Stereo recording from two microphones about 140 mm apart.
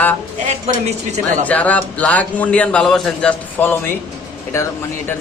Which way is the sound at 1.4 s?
10° left (ahead or behind).